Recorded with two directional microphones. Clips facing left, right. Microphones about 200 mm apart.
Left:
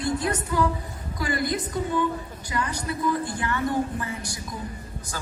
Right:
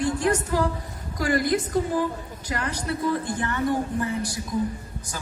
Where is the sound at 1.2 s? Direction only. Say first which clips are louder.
Right 4 dB; 50° right (ahead or behind).